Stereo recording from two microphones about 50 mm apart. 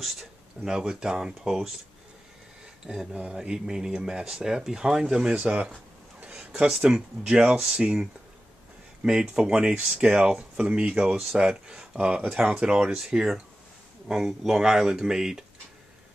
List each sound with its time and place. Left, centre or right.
0.0 s speech: centre
0.7 s speech: centre
2.9 s speech: centre
5.3 s speech: right
6.6 s speech: centre